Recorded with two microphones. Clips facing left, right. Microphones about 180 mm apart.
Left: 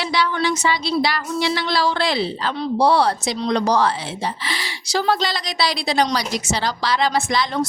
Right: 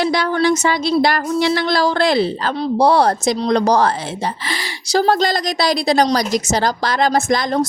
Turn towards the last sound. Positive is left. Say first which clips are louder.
# right 4 dB
turn(degrees=-45)  # may be behind; listen again after turning